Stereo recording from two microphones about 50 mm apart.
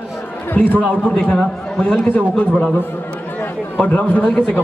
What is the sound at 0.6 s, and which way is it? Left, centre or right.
A man's voice, left.